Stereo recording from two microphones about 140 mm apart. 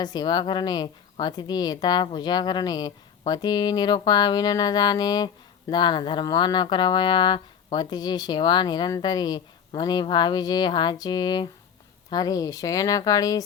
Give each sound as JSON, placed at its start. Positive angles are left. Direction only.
{"t": 0.0, "sound": "a woman's voice", "side_deg": 30}